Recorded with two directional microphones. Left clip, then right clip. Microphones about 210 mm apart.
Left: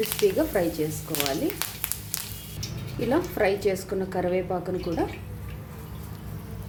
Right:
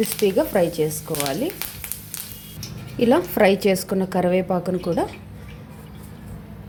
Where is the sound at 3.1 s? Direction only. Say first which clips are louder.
Right 6 dB; 35° right (ahead or behind).